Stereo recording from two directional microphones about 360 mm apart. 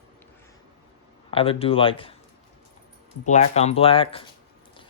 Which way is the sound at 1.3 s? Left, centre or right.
Centre.